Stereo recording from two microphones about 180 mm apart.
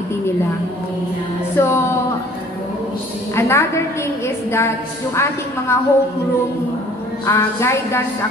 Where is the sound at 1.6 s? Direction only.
15° left (ahead or behind).